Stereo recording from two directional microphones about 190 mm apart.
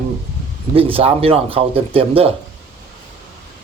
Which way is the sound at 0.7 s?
30° right (ahead or behind).